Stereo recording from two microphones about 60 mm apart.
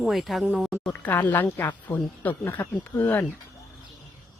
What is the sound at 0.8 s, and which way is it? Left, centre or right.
A woman's voice, left.